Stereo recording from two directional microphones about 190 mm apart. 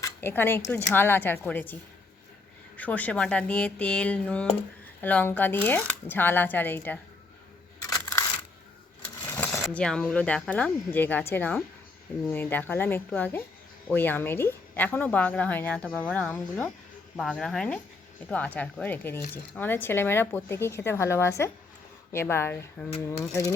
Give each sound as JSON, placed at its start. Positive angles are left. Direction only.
{"t": 0.0, "sound": "speech", "side_deg": 10}
{"t": 2.7, "sound": "speech", "side_deg": 10}
{"t": 7.9, "sound": "coin", "side_deg": 15}
{"t": 9.3, "sound": "a sound", "side_deg": 5}
{"t": 9.7, "sound": "speech", "side_deg": 5}